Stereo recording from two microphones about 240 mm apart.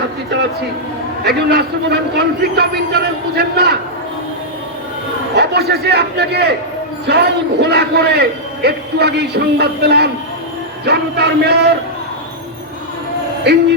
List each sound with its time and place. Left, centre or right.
1.2 s a man's voice: right
5.3 s a man's voice: right